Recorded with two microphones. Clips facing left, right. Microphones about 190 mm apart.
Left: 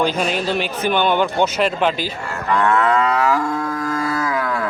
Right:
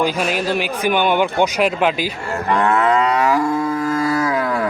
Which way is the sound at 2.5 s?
25° right (ahead or behind).